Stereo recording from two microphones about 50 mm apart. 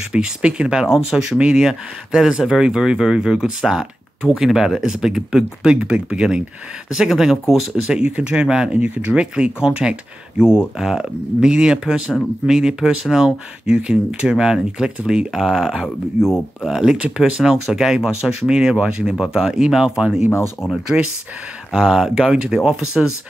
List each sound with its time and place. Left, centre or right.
0.1 s speech: centre
0.8 s speech: centre
7.8 s speech: centre
8.7 s speech: right
9.1 s speech: centre
16.3 s speech: centre
16.8 s speech: centre
17.2 s speech: centre
20.2 s speech: left
21.7 s speech: centre